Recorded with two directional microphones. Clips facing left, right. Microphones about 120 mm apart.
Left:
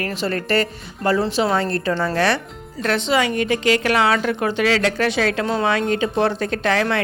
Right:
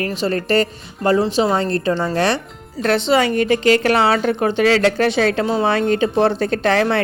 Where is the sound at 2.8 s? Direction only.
35° right (ahead or behind).